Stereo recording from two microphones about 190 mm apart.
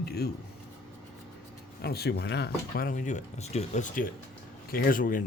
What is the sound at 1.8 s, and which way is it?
Speech, 55° left (ahead or behind).